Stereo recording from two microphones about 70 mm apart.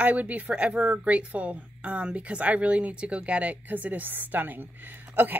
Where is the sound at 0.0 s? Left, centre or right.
Right.